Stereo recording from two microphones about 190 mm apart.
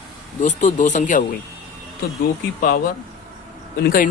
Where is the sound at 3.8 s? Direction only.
50° left (ahead or behind).